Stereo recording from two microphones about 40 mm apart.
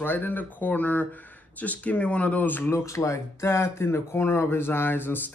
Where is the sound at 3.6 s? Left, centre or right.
Left.